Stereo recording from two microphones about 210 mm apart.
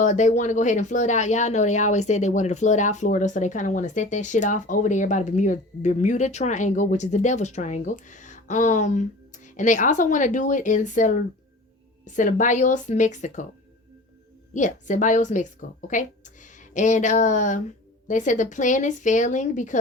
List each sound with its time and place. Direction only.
0.0 s speech: 35° left (ahead or behind)
14.5 s speech: 35° left (ahead or behind)